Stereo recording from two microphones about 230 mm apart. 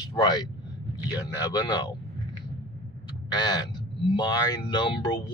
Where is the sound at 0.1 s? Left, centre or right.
Centre.